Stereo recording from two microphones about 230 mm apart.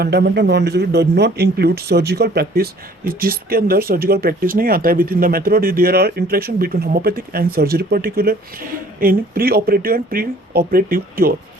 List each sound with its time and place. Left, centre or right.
0.0 s speech: right